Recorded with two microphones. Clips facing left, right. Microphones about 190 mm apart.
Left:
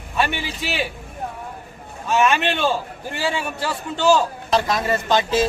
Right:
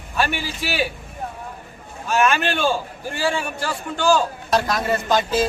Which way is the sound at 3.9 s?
25° left (ahead or behind).